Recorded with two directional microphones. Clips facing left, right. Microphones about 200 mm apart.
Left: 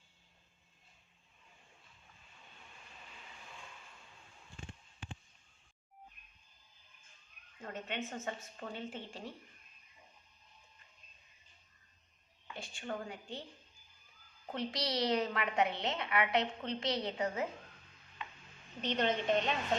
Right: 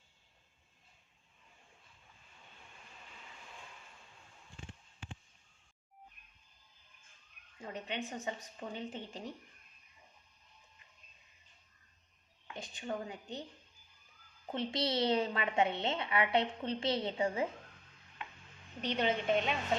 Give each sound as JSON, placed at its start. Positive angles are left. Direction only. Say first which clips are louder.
{"t": 7.6, "sound": "a woman's voice", "louder": "right 1 dB", "side_deg": -15}
{"t": 12.5, "sound": "a woman's voice", "louder": "right 2 dB", "side_deg": -20}
{"t": 14.5, "sound": "a woman's voice", "louder": "right 2 dB", "side_deg": -25}
{"t": 18.8, "sound": "a woman's voice", "louder": "even", "side_deg": -10}